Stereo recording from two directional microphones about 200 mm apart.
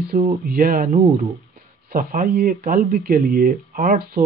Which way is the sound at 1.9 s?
50° right (ahead or behind).